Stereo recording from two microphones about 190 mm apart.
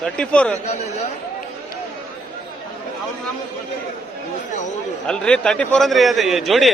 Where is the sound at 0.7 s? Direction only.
35° left (ahead or behind).